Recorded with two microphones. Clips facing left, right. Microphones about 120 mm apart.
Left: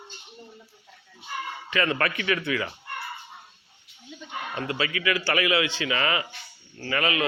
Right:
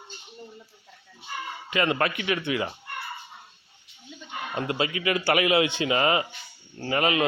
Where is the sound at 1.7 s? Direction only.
20° right (ahead or behind).